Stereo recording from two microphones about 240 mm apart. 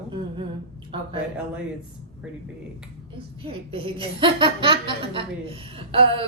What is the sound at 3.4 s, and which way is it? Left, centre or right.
Speech, right.